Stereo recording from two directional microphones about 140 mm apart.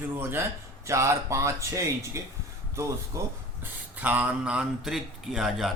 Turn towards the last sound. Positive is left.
turn(degrees=0)  # may be behind; listen again after turning